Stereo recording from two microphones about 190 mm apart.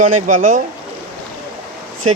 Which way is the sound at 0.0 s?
45° right (ahead or behind).